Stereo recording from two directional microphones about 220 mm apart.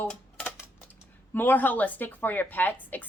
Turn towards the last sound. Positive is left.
turn(degrees=10)  # may be behind; listen again after turning